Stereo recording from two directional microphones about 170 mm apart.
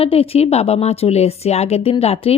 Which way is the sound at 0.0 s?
35° left (ahead or behind).